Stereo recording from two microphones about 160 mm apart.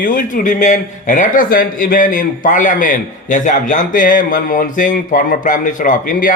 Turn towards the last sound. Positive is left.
turn(degrees=60)  # may be behind; listen again after turning